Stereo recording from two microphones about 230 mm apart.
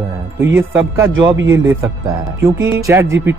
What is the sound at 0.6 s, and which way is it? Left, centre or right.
A man's voice, centre.